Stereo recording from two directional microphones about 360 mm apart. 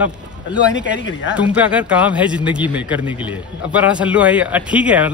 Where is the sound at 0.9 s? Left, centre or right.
Left.